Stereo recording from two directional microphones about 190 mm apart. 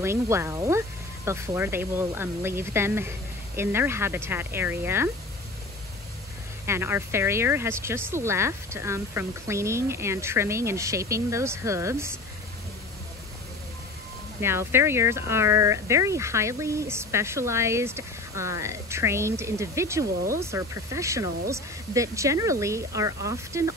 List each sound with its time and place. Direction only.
0.0 s speech: 15° right (ahead or behind)
6.6 s speech: 15° right (ahead or behind)
14.4 s speech: 15° right (ahead or behind)